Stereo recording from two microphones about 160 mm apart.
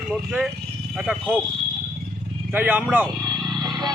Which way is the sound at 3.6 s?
25° right (ahead or behind).